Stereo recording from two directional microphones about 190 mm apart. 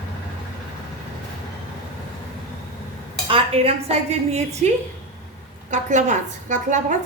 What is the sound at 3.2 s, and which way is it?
A woman's voice, 30° right (ahead or behind).